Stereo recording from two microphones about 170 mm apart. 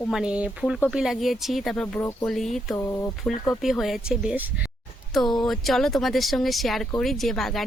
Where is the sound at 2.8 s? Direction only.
15° left (ahead or behind).